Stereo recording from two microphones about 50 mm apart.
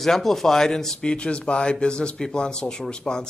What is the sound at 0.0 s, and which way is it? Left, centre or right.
Speech, centre.